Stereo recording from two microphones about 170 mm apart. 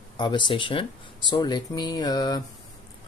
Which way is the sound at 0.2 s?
30° left (ahead or behind).